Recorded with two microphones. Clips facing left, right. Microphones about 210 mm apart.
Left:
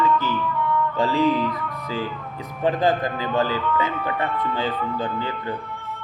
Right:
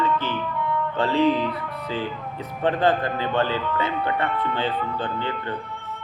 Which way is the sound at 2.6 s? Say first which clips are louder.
Even; 10° left (ahead or behind).